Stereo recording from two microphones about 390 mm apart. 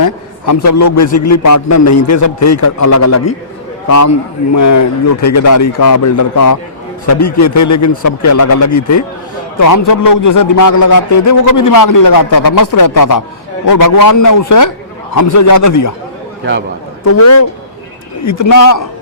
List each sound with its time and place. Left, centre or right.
0.0 s a man's voice: left
17.1 s a man's voice: left